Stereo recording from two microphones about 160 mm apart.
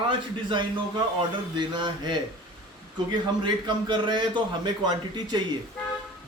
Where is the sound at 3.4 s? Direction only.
25° right (ahead or behind).